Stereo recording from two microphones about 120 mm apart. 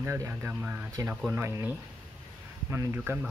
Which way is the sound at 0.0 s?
20° right (ahead or behind).